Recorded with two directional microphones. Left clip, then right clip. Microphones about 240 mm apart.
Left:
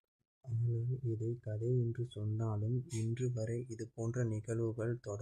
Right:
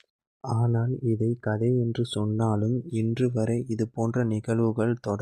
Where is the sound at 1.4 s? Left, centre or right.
Right.